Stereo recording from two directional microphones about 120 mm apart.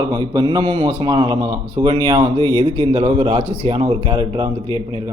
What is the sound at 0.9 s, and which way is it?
Speech, 40° right (ahead or behind).